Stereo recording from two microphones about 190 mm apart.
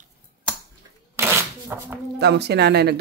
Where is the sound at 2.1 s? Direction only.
60° right (ahead or behind).